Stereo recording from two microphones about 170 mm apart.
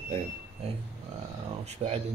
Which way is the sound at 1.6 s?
35° right (ahead or behind).